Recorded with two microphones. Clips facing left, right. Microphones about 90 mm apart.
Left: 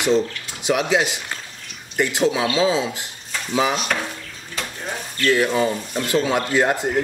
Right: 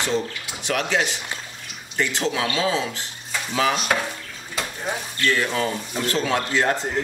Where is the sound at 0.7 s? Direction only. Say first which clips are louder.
Left 4 dB; 15° left (ahead or behind).